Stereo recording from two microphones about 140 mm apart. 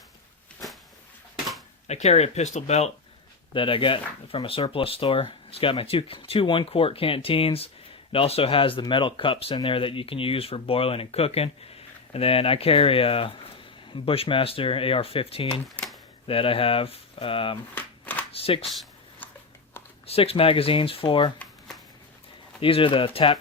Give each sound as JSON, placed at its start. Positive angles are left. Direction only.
{"t": 1.9, "sound": "speech", "side_deg": 50}
{"t": 3.5, "sound": "speech", "side_deg": 40}
{"t": 15.7, "sound": "a sound", "side_deg": 5}
{"t": 16.2, "sound": "speech", "side_deg": 40}
{"t": 17.7, "sound": "shuffling cards", "side_deg": 15}
{"t": 18.3, "sound": "speech", "side_deg": 45}
{"t": 20.1, "sound": "speech", "side_deg": 45}
{"t": 22.6, "sound": "speech", "side_deg": 40}